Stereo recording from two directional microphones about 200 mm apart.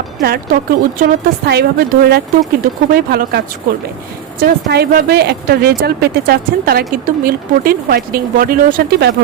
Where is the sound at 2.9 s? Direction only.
50° right (ahead or behind).